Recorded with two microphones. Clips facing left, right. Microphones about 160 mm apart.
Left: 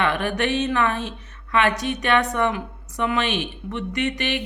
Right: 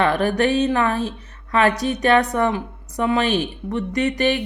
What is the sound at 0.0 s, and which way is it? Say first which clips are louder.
Speech: right 5 dB; 35° right (ahead or behind).